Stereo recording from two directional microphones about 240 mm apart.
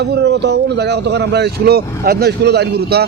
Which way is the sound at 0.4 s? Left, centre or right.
Right.